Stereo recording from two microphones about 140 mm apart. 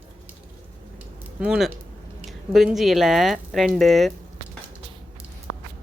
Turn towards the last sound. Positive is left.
turn(degrees=0)  # may be behind; listen again after turning